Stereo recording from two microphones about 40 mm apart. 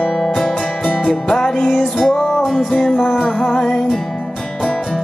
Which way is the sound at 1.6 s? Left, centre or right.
Centre.